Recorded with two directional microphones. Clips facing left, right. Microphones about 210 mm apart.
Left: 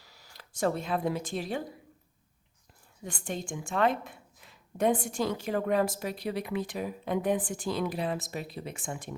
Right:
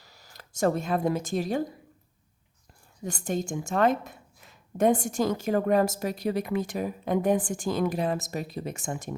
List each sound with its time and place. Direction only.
0.0 s speech: 45° right (ahead or behind)
3.0 s a woman's voice: 40° right (ahead or behind)